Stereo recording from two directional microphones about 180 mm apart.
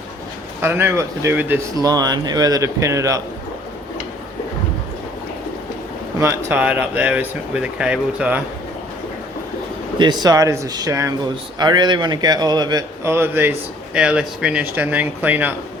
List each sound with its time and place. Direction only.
0.6 s speech: 10° right (ahead or behind)
6.1 s speech: 15° right (ahead or behind)
10.0 s a man's voice: 25° right (ahead or behind)